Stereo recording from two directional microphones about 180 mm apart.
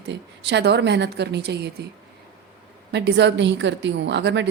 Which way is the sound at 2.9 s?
75° right (ahead or behind).